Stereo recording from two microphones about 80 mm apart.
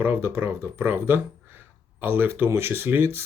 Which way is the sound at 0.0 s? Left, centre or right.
Right.